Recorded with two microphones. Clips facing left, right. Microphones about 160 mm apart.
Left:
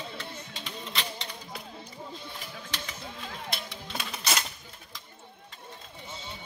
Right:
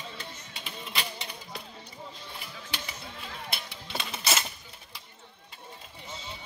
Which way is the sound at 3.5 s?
5° right (ahead or behind).